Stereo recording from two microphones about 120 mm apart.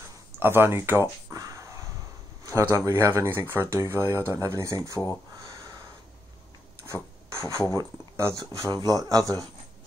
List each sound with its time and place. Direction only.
0.4 s crow: 20° right (ahead or behind)
2.4 s speech: 25° right (ahead or behind)
6.8 s rub: 25° right (ahead or behind)
7.7 s speech: 25° right (ahead or behind)